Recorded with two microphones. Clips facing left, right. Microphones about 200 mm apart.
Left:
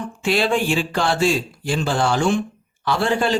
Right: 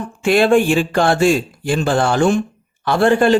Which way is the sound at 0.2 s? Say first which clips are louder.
Right 7 dB; 55° right (ahead or behind).